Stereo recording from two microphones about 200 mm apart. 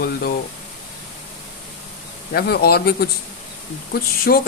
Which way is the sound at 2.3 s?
50° left (ahead or behind).